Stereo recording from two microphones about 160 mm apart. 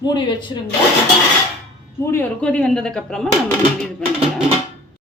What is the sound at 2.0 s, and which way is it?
Speech, 15° left (ahead or behind).